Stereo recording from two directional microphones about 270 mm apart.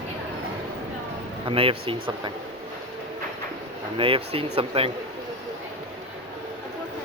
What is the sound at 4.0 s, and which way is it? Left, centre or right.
Speech, right.